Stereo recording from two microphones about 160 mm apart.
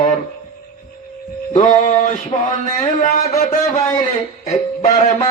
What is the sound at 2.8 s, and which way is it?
Speech, 45° left (ahead or behind).